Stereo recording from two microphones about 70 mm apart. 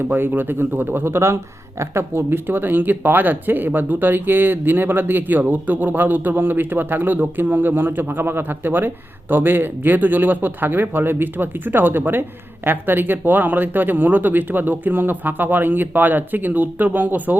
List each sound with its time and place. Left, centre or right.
0.0 s speech: right